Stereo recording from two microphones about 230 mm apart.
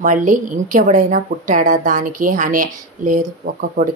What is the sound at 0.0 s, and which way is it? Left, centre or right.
Speech, right.